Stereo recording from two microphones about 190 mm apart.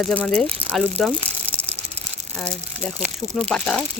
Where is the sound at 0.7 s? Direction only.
5° left (ahead or behind).